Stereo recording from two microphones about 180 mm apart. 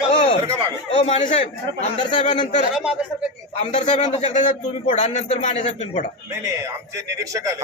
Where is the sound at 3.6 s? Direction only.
40° left (ahead or behind).